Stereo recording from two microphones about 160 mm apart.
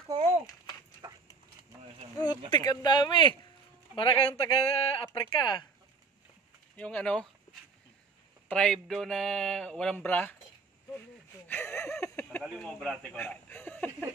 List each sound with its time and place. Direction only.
1.0 s a sound: 20° right (ahead or behind)
2.5 s speech: 25° left (ahead or behind)
6.8 s speech: 5° left (ahead or behind)
8.5 s speech: 5° left (ahead or behind)
11.4 s a sound: 15° left (ahead or behind)
12.4 s speech: 5° left (ahead or behind)